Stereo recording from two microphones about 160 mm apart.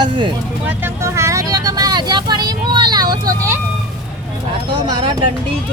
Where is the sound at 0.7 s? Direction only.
15° right (ahead or behind).